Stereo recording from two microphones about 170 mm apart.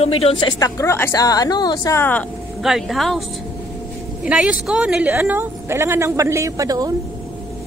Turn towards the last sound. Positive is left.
turn(degrees=-20)  # may be behind; listen again after turning